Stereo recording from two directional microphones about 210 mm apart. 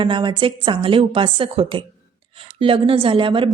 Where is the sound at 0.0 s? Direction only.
25° right (ahead or behind).